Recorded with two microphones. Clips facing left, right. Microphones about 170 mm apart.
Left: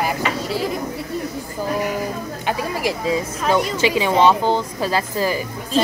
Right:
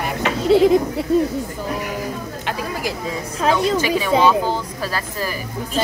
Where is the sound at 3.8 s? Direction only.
20° left (ahead or behind).